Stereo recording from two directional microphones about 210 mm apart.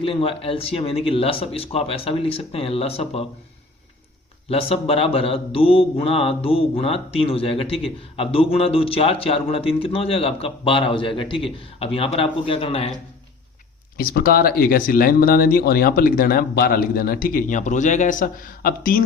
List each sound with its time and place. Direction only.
0.0 s a man's voice: 25° left (ahead or behind)
4.4 s a man's voice: 30° left (ahead or behind)
13.9 s speech: 45° left (ahead or behind)